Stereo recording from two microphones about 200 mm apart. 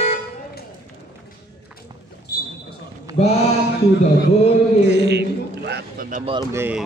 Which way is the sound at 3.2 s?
30° left (ahead or behind).